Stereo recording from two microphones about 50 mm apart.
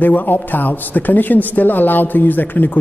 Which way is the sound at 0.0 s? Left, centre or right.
Left.